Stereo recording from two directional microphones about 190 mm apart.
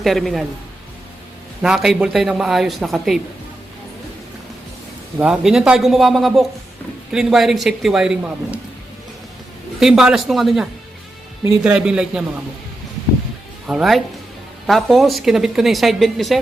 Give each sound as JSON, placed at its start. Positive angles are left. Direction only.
{"t": 0.0, "sound": "a woman's voice", "side_deg": 0}
{"t": 1.6, "sound": "a woman's voice", "side_deg": -5}
{"t": 5.2, "sound": "a woman's voice", "side_deg": -5}
{"t": 9.8, "sound": "a woman's voice", "side_deg": 0}
{"t": 13.7, "sound": "a woman's voice", "side_deg": 0}